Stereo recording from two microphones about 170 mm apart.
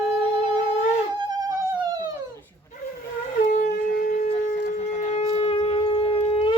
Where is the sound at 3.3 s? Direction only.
50° left (ahead or behind).